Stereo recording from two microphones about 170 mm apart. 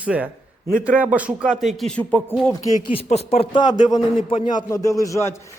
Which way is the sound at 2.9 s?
35° left (ahead or behind).